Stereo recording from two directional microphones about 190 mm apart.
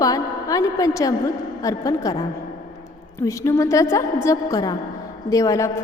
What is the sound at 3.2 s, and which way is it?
A woman's voice, 15° left (ahead or behind).